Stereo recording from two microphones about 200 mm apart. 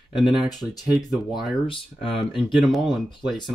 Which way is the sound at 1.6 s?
25° left (ahead or behind).